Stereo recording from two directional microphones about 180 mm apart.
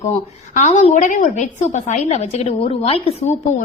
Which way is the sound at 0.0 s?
40° left (ahead or behind).